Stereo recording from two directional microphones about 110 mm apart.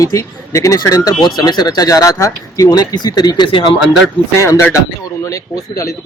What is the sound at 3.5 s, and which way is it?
Speech, 50° left (ahead or behind).